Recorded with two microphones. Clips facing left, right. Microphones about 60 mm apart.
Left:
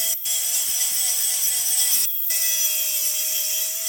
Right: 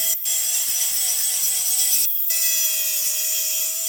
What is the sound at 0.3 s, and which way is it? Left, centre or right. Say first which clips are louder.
Wood: even; right.